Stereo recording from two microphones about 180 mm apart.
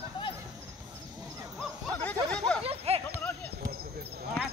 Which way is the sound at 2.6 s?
30° right (ahead or behind).